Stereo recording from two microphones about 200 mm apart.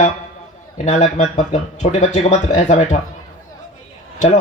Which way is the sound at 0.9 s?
35° left (ahead or behind).